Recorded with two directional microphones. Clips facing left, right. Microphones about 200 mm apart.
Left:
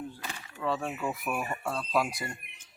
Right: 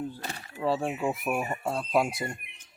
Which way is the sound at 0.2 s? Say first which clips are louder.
Right 4 dB; 40° right (ahead or behind).